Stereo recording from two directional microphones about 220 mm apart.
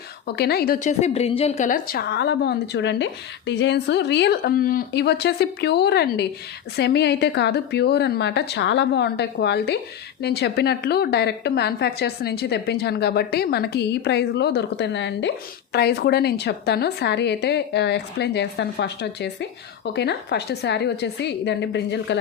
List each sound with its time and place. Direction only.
0.3 s a woman's voice: 45° left (ahead or behind)